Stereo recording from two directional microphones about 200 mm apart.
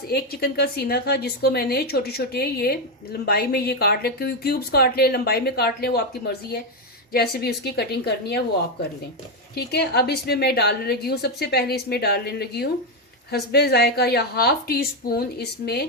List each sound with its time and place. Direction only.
0.1 s a woman's voice: 50° left (ahead or behind)
9.6 s a woman's voice: 55° left (ahead or behind)